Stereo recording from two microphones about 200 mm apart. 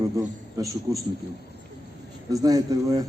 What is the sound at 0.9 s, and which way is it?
Speech, 20° right (ahead or behind).